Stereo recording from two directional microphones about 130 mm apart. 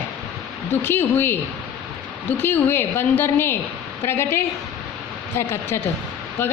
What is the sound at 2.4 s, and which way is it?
A woman's voice, 15° left (ahead or behind).